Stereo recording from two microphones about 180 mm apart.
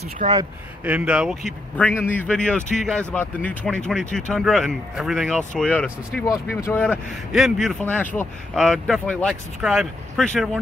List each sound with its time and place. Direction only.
0.2 s speech: 50° right (ahead or behind)
0.8 s speech: 5° right (ahead or behind)